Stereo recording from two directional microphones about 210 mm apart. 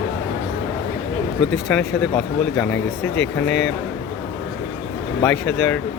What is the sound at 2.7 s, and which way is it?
Speech, 60° left (ahead or behind).